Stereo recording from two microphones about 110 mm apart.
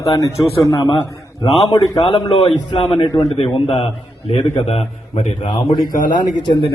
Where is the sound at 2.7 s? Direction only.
55° left (ahead or behind); by 5.4 s 75° left (ahead or behind).